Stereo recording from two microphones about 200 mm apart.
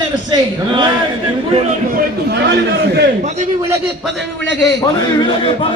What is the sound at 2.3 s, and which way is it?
Speech, 60° right (ahead or behind).